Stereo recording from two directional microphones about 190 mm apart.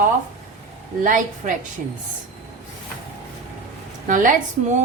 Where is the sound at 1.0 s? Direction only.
45° right (ahead or behind).